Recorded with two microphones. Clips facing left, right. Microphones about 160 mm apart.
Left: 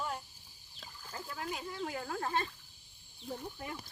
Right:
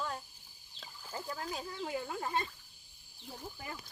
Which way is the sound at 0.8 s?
5° right (ahead or behind).